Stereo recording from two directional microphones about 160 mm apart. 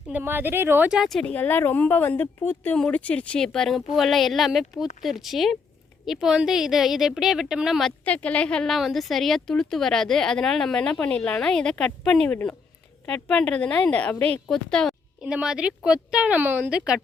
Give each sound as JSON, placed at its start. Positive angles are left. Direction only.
{"t": 0.1, "sound": "a woman's voice", "side_deg": -10}